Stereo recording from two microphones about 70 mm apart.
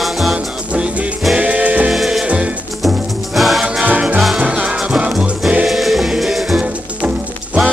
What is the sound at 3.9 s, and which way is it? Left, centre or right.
Music, centre.